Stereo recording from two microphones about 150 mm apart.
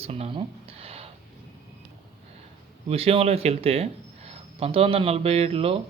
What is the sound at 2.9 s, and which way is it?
Speech, 40° right (ahead or behind).